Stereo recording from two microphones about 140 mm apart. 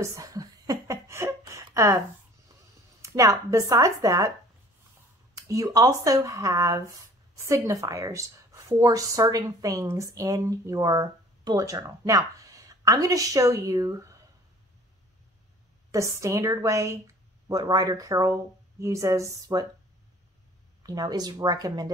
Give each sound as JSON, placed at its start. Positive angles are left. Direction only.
{"t": 0.0, "sound": "a sound", "side_deg": -20}
{"t": 3.0, "sound": "speech", "side_deg": -20}
{"t": 5.3, "sound": "speech", "side_deg": -25}
{"t": 15.9, "sound": "speech", "side_deg": -20}
{"t": 20.8, "sound": "speech", "side_deg": -25}